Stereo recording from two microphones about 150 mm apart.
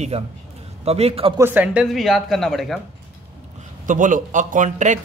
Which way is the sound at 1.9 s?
Centre (ahead or behind).